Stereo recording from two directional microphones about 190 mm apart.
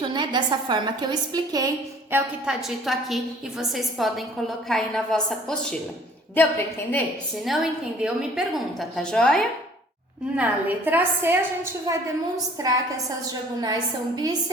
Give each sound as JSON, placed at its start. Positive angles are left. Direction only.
{"t": 0.1, "sound": "a woman's voice", "side_deg": -25}
{"t": 7.4, "sound": "a woman's voice", "side_deg": 0}
{"t": 10.3, "sound": "a woman's voice", "side_deg": -10}